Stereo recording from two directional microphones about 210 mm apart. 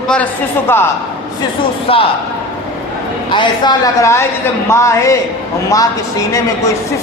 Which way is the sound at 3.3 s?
20° left (ahead or behind).